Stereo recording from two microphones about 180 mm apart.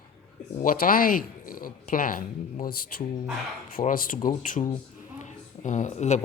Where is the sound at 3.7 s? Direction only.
50° left (ahead or behind).